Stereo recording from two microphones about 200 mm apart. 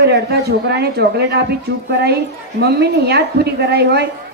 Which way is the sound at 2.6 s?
55° right (ahead or behind).